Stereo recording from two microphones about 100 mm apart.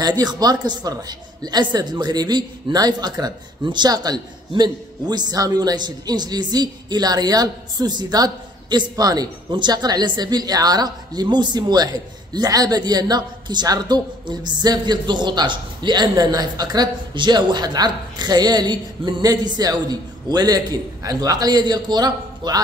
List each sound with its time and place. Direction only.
0.2 s a woman's voice: 40° right (ahead or behind)